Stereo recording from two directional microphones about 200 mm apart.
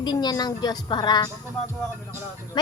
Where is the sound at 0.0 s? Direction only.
20° left (ahead or behind).